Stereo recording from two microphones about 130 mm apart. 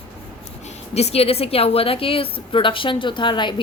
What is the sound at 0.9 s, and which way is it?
A woman's voice, 55° left (ahead or behind).